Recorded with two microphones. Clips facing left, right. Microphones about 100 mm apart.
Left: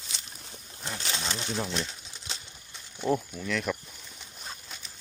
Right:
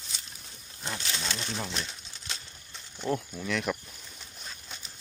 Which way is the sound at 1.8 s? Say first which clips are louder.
Left 2 dB; 20° left (ahead or behind).